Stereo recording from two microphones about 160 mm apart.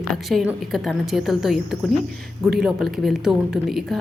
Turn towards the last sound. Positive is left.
turn(degrees=0)  # may be behind; listen again after turning